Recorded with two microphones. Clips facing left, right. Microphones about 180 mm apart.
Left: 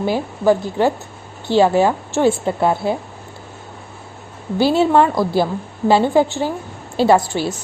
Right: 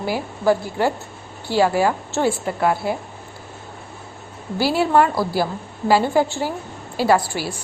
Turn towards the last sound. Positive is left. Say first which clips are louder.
# left 4 dB
turn(degrees=25)  # may be behind; listen again after turning